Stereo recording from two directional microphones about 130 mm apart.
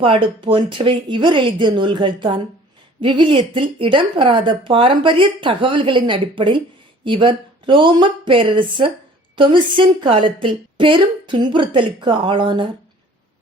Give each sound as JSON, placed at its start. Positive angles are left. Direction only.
{"t": 0.0, "sound": "speech", "side_deg": -40}